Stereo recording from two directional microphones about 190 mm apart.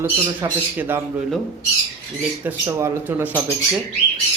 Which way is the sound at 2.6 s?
10° right (ahead or behind).